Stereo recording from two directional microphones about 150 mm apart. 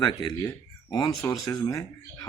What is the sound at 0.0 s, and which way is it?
A man's voice, 30° left (ahead or behind).